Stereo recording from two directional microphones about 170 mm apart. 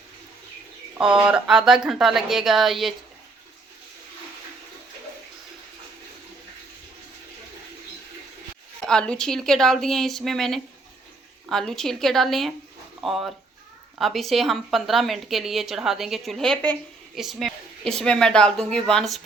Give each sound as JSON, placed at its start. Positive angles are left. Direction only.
{"t": 0.9, "sound": "a woman's voice", "side_deg": -5}
{"t": 8.9, "sound": "a woman's voice", "side_deg": 5}